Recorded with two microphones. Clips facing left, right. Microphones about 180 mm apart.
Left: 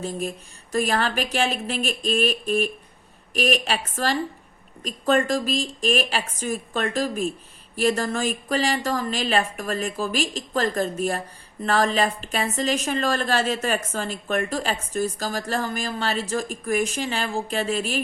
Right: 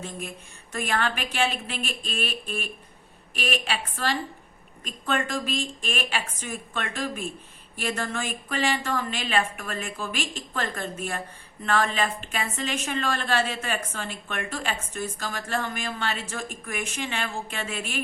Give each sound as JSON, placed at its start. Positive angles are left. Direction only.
{"t": 0.0, "sound": "a woman's voice", "side_deg": 35}